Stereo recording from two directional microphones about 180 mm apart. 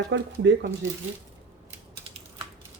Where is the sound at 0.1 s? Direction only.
90° right.